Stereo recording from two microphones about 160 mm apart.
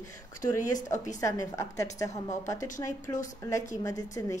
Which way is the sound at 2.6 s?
55° left (ahead or behind).